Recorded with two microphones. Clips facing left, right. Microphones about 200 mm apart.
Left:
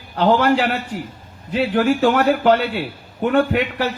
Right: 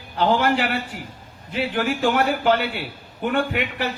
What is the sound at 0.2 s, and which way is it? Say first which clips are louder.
Speech: left 4 dB; 40° left (ahead or behind).